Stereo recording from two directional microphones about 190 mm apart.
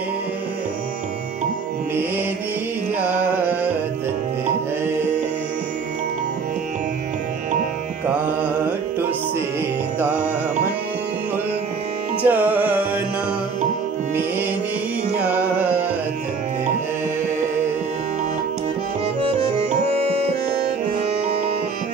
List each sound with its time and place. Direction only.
12.2 s carnatic music: 10° right (ahead or behind)
19.9 s music: 30° right (ahead or behind)